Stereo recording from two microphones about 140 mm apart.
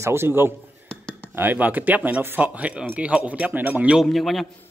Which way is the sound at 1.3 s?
15° right (ahead or behind).